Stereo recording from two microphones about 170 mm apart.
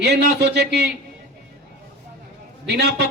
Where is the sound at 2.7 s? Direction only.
75° right (ahead or behind).